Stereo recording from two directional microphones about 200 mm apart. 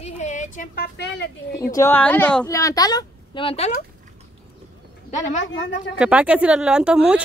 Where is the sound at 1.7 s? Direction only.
10° left (ahead or behind); by 3.7 s 30° left (ahead or behind).